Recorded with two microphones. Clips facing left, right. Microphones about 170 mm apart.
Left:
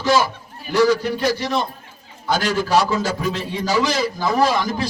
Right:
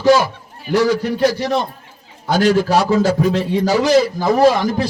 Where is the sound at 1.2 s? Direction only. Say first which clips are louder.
Right 4 dB; 60° right (ahead or behind).